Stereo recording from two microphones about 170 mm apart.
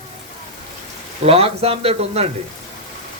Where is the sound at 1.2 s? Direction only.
35° right (ahead or behind).